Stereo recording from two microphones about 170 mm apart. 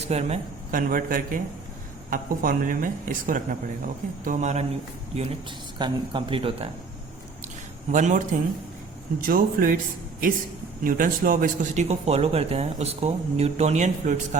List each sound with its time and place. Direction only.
0.1 s speech: 40° right (ahead or behind)
5.1 s speech: 30° right (ahead or behind)
7.9 s speech: 45° right (ahead or behind)
9.2 s speech: 55° right (ahead or behind)